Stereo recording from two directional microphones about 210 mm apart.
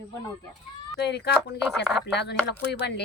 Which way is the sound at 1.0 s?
55° left (ahead or behind).